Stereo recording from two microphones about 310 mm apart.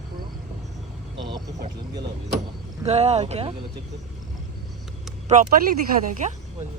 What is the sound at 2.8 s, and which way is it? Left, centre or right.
Speech, right.